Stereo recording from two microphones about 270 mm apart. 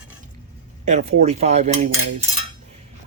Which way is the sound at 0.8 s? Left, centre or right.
Right.